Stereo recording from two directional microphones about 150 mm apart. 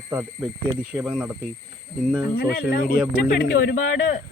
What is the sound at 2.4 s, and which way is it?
Speech, 70° left (ahead or behind).